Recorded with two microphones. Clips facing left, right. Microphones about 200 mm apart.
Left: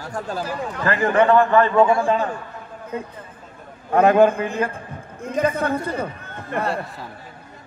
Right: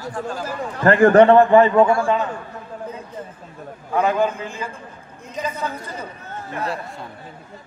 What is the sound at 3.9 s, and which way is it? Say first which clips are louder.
A man's voice: left 5 dB; 60° left (ahead or behind).